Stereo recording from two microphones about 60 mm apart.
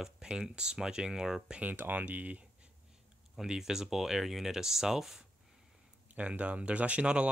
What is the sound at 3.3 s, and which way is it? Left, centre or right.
Speech, centre.